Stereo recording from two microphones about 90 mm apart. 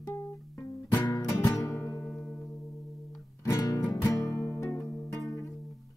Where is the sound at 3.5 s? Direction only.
45° left (ahead or behind).